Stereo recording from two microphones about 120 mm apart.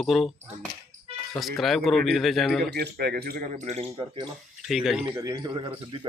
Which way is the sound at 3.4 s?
80° right.